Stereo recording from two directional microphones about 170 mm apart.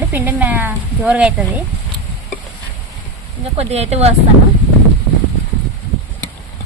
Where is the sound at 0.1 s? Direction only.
10° right (ahead or behind).